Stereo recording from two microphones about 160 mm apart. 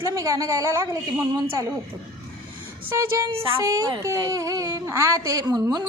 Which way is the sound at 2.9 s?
15° right (ahead or behind).